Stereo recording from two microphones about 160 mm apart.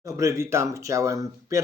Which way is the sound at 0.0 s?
20° right (ahead or behind).